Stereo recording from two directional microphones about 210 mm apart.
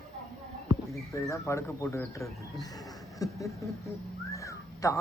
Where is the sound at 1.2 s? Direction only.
15° left (ahead or behind).